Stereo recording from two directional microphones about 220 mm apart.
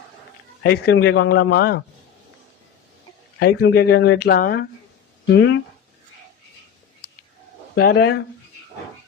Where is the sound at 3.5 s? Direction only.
50° left (ahead or behind).